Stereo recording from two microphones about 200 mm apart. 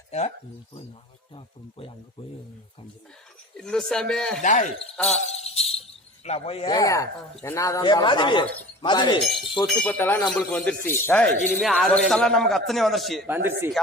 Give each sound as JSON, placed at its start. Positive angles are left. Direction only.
{"t": 0.1, "sound": "jingle bell", "side_deg": 35}
{"t": 3.6, "sound": "a man's voice", "side_deg": 5}
{"t": 4.4, "sound": "jingle bell", "side_deg": 35}
{"t": 6.2, "sound": "speech", "side_deg": 30}
{"t": 6.7, "sound": "a man's voice", "side_deg": 15}
{"t": 9.6, "sound": "a man's voice", "side_deg": 10}
{"t": 13.3, "sound": "speech", "side_deg": -10}